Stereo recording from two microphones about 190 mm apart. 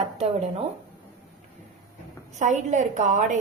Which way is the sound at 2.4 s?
40° right (ahead or behind).